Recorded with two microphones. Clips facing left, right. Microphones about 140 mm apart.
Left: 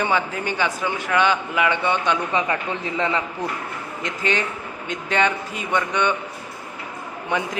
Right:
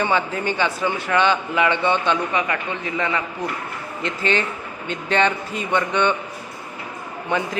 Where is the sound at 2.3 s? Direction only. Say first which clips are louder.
Even; 25° left (ahead or behind).